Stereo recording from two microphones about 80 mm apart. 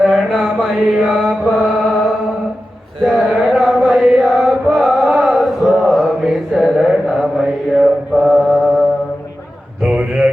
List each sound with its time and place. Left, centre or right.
0.0 s mantra: centre
3.0 s chant: centre
9.8 s a sound: centre